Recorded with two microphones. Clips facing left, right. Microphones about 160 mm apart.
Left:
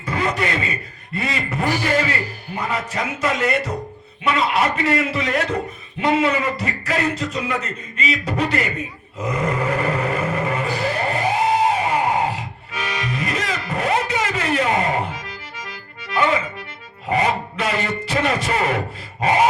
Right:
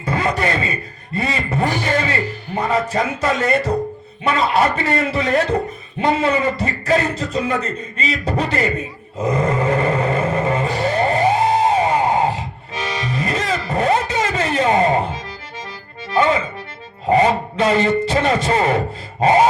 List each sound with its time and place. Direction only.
0.0 s beatboxing: 30° right (ahead or behind)
1.1 s speech: 30° right (ahead or behind)
9.2 s roar: 30° right (ahead or behind)
17.1 s speech: 30° right (ahead or behind)